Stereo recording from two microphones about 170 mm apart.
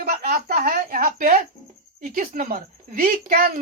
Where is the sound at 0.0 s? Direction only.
60° right (ahead or behind).